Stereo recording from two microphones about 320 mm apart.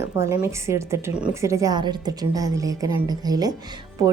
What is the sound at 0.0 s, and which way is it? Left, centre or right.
Speech, centre.